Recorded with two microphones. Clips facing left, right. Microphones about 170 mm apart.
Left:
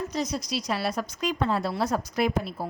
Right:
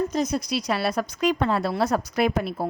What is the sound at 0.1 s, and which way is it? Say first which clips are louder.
A woman's voice: right 5 dB; 55° right (ahead or behind).